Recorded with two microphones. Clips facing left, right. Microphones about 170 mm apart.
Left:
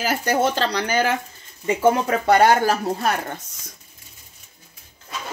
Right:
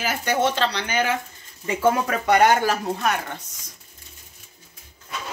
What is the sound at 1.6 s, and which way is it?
Speech, 20° left (ahead or behind).